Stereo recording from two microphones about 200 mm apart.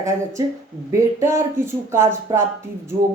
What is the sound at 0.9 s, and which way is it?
Speech, 15° right (ahead or behind).